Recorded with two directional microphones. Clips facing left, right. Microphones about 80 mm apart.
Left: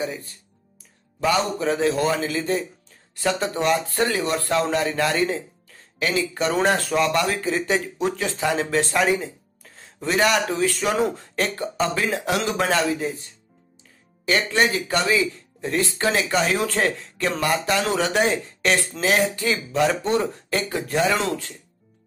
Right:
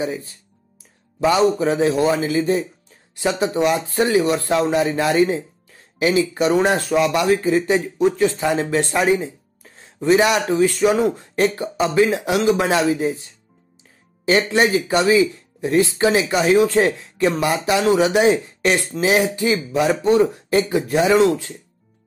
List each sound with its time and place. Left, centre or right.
1.2 s speech: centre
9.6 s a sound: centre
10.5 s speech: centre
14.2 s speech: right